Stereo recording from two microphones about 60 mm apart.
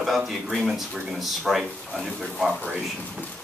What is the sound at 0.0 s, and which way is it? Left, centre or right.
Speech, centre.